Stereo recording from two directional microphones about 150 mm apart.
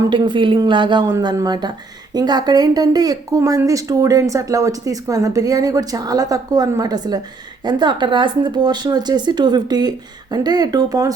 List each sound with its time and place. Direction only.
0.1 s speech: 30° right (ahead or behind)